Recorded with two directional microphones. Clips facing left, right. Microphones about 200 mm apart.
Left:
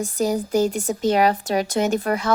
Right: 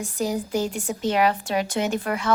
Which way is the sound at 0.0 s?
40° left (ahead or behind).